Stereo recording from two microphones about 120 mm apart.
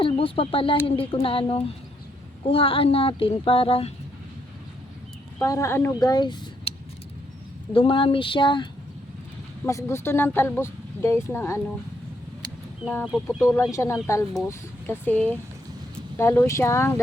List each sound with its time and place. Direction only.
0.0 s speech: 50° left (ahead or behind)
5.4 s speech: 25° left (ahead or behind)
6.0 s speech: 35° left (ahead or behind)
7.7 s speech: 45° left (ahead or behind)
9.6 s speech: 25° left (ahead or behind)
12.8 s speech: 5° right (ahead or behind)
13.2 s speech: 25° left (ahead or behind)